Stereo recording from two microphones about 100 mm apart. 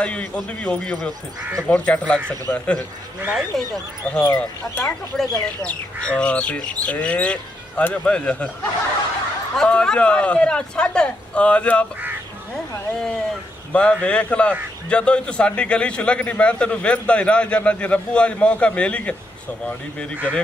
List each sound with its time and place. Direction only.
0.0 s a man's voice: 10° left (ahead or behind)
3.3 s a man's voice: centre (ahead or behind)
9.6 s a man's voice: 10° left (ahead or behind)
13.7 s a man's voice: 10° left (ahead or behind)